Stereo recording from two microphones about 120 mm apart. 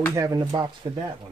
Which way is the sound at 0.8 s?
50° right (ahead or behind).